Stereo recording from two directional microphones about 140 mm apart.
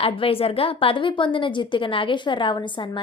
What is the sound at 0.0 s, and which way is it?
A woman's voice, 40° left (ahead or behind).